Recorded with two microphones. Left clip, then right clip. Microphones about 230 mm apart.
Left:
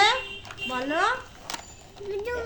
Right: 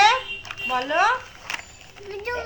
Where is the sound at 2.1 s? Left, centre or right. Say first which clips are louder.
Right 1 dB; centre.